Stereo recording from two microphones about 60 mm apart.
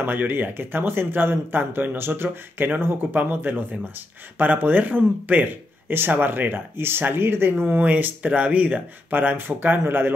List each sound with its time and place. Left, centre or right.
0.0 s speech: right